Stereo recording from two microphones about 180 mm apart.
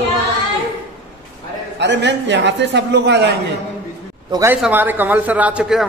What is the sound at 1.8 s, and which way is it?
A man's voice, 80° right.